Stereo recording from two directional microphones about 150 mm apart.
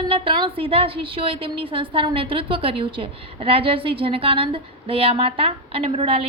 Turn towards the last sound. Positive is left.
turn(degrees=-40)  # may be behind; listen again after turning